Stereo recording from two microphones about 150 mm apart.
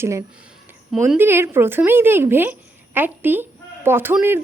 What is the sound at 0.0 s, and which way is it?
Speech, 20° right (ahead or behind).